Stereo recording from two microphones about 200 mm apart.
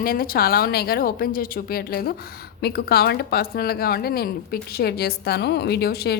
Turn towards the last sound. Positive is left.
turn(degrees=50)  # may be behind; listen again after turning